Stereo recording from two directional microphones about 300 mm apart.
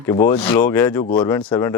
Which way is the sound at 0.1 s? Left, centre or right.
Centre.